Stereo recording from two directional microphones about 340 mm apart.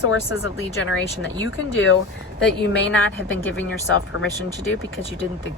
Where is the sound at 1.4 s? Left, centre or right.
Left.